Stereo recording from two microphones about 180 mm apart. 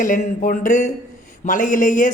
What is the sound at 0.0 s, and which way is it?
Speech, 45° left (ahead or behind).